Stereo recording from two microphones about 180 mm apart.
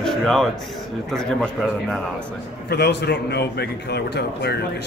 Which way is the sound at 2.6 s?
65° left (ahead or behind).